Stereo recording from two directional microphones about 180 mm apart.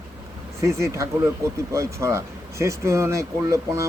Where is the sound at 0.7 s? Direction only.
15° right (ahead or behind).